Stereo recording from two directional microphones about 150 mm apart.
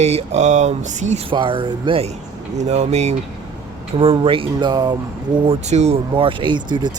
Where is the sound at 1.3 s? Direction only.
35° right (ahead or behind).